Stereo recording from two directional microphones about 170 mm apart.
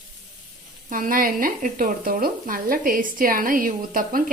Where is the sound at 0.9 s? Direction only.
55° right (ahead or behind).